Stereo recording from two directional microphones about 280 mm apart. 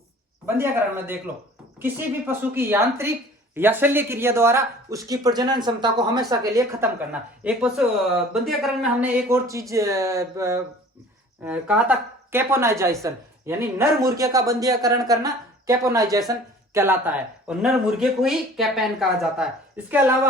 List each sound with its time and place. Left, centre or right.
0.4 s speech: centre